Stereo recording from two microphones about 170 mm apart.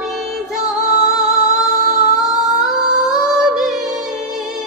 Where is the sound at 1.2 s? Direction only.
Centre (ahead or behind).